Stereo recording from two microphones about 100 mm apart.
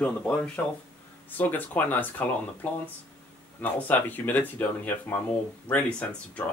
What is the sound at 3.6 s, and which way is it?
Speech, 15° left (ahead or behind).